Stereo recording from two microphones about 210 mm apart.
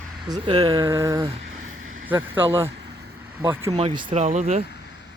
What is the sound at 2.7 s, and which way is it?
Vehicle, 50° right (ahead or behind).